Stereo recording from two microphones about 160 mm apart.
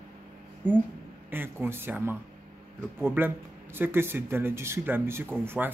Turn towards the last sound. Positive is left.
turn(degrees=-15)  # may be behind; listen again after turning